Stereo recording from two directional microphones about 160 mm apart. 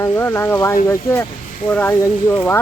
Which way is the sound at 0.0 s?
15° left (ahead or behind).